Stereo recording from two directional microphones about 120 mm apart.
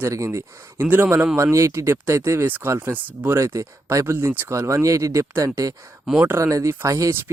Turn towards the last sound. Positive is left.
turn(degrees=-25)  # may be behind; listen again after turning